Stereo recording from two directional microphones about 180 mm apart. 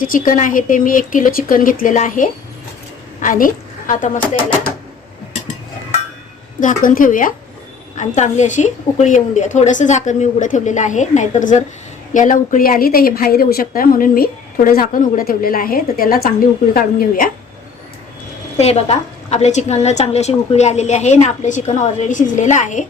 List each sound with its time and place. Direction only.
0.0 s a woman's voice: 50° left (ahead or behind)
6.6 s a woman's voice: 45° left (ahead or behind)
18.5 s a woman's voice: 35° left (ahead or behind)